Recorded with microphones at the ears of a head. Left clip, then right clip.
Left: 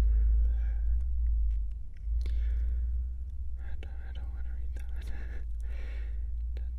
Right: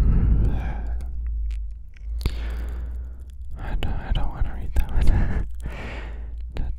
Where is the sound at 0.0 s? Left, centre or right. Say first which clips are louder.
Right 15 dB; right.